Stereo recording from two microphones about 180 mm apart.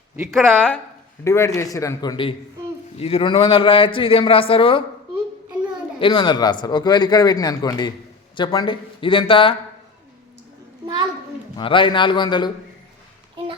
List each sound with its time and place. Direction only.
0.3 s speech: centre (ahead or behind)
1.2 s a man's voice: 15° left (ahead or behind)
6.0 s speech: 25° left (ahead or behind)
11.5 s speech: 30° left (ahead or behind)